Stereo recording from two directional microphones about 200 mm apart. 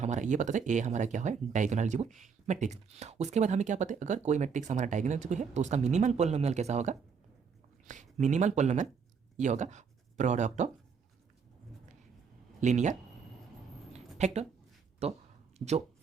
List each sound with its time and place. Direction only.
0.0 s speech: 40° right (ahead or behind)
12.5 s speech: 35° right (ahead or behind)
14.2 s a woman's voice: 35° right (ahead or behind)